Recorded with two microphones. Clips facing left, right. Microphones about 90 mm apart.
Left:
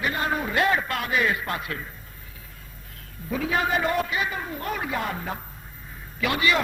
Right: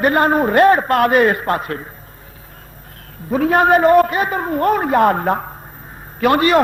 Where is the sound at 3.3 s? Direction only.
50° right (ahead or behind).